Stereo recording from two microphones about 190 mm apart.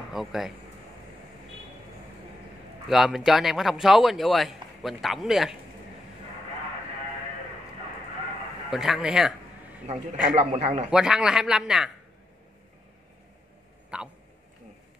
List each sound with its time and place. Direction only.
0.1 s speech: centre (ahead or behind)
2.9 s speech: 5° right (ahead or behind)
8.6 s speech: centre (ahead or behind)
10.2 s a man's voice: 35° right (ahead or behind)
10.9 s speech: 5° right (ahead or behind)
13.9 s speech: 5° right (ahead or behind)